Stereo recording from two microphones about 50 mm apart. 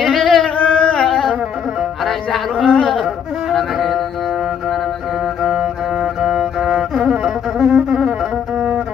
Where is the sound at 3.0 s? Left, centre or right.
Centre.